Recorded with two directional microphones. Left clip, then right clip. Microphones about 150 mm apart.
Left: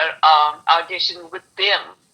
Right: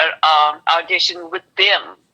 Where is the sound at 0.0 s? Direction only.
40° right (ahead or behind).